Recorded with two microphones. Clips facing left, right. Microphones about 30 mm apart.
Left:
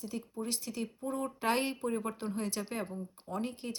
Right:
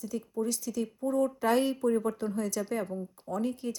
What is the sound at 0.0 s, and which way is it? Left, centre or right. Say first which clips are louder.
Speech: right 6 dB; left.